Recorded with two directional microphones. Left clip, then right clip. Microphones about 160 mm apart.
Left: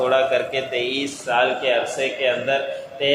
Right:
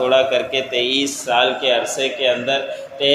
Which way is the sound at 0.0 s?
25° right (ahead or behind).